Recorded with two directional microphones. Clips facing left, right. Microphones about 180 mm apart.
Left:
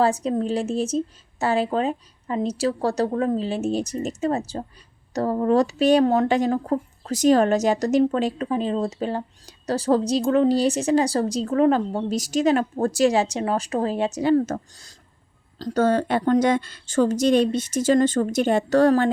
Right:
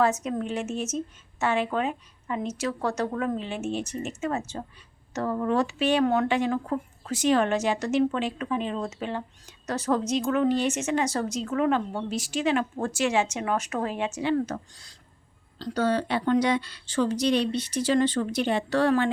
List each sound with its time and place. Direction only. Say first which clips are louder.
0.0 s speech: left 4 dB; 30° left (ahead or behind)